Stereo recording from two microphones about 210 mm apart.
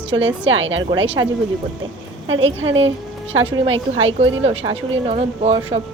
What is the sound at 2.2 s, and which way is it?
Speech, 65° right (ahead or behind).